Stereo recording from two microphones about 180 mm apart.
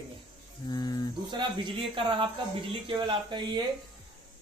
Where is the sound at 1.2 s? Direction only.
25° right (ahead or behind).